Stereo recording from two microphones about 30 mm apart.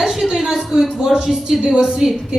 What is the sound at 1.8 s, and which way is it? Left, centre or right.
Speech, right.